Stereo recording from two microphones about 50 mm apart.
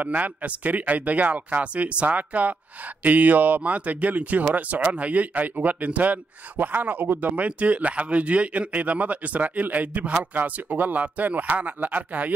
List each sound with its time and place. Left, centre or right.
0.0 s speech: right